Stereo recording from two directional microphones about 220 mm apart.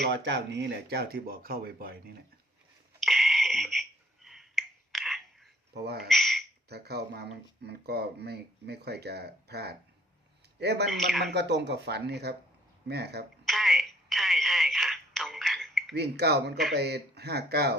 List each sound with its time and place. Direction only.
0.0 s speech: 50° right (ahead or behind)
3.0 s finger snapping: centre (ahead or behind)
5.7 s speech: 45° right (ahead or behind)
6.1 s speech: centre (ahead or behind)
6.7 s speech: 45° right (ahead or behind)
10.8 s speech: centre (ahead or behind)
11.3 s speech: 50° right (ahead or behind)
13.4 s telephone: centre (ahead or behind)
16.0 s speech: 50° right (ahead or behind)